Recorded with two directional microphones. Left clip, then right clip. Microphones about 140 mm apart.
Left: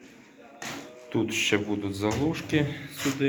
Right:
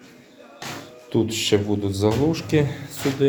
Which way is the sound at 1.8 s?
50° right (ahead or behind).